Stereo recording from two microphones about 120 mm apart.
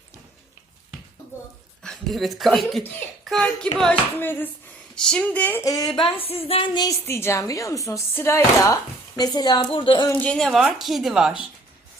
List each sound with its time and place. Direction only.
1.8 s speech: 5° left (ahead or behind)
5.6 s speech: 30° left (ahead or behind)
6.0 s speech: 50° left (ahead or behind)
7.0 s speech: 20° left (ahead or behind); by 10.1 s 45° left (ahead or behind)
10.1 s speech: 15° left (ahead or behind)
10.3 s speech: centre (ahead or behind)